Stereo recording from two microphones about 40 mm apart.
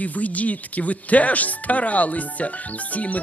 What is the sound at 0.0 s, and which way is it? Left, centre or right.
Speech, left.